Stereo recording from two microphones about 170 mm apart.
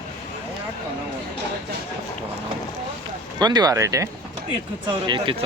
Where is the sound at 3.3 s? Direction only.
25° right (ahead or behind).